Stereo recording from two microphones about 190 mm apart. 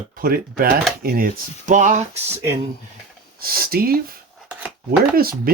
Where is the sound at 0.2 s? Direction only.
50° right (ahead or behind).